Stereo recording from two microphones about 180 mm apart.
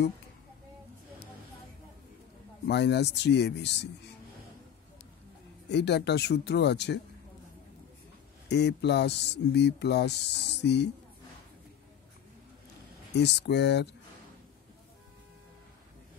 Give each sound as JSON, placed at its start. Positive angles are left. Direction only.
{"t": 2.6, "sound": "speech", "side_deg": 70}
{"t": 5.7, "sound": "speech", "side_deg": 70}
{"t": 8.5, "sound": "speech", "side_deg": 70}
{"t": 13.1, "sound": "speech", "side_deg": 70}